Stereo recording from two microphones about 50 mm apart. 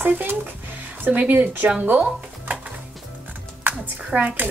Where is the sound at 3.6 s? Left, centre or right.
Right.